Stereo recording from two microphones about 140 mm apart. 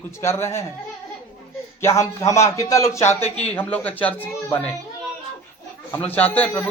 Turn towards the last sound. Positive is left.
turn(degrees=10)  # may be behind; listen again after turning